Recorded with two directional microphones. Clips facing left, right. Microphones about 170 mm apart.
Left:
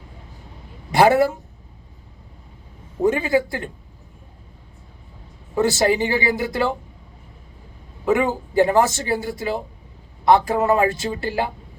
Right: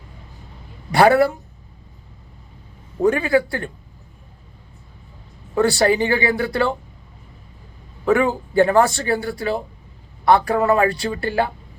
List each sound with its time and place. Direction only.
0.9 s a woman's voice: 20° left (ahead or behind)
3.0 s speech: 20° left (ahead or behind)
5.5 s speech: 20° left (ahead or behind)
8.0 s a man's voice: 20° left (ahead or behind)